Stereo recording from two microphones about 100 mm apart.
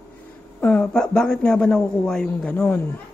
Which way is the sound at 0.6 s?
10° left (ahead or behind).